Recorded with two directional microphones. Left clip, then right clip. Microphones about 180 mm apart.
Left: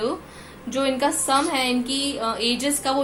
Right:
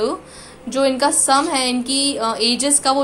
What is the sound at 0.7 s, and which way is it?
A woman's voice, 25° right (ahead or behind).